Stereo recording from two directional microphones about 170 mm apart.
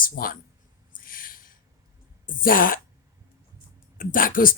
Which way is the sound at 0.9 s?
55° left (ahead or behind).